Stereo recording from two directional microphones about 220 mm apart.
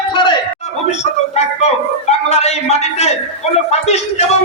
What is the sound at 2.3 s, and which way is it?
Speech, 30° left (ahead or behind).